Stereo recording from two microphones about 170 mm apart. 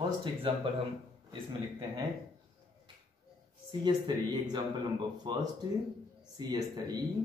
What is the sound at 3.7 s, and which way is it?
Speech, 25° right (ahead or behind).